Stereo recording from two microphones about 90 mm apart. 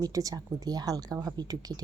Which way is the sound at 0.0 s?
40° right (ahead or behind).